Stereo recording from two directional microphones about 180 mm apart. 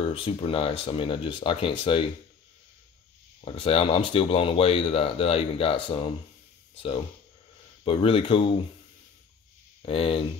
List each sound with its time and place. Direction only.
0.0 s speech: 30° left (ahead or behind)
3.3 s speech: 30° left (ahead or behind)
7.8 s speech: 30° left (ahead or behind)
9.8 s speech: 30° left (ahead or behind)